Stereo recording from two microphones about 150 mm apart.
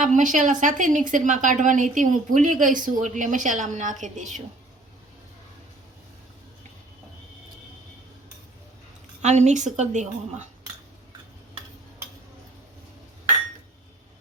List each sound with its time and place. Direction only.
0.0 s speech: 60° right (ahead or behind)
9.2 s a woman's voice: 50° right (ahead or behind)